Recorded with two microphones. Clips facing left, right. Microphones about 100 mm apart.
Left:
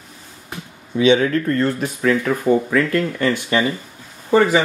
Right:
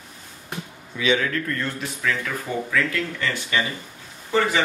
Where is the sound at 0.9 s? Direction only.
25° left (ahead or behind).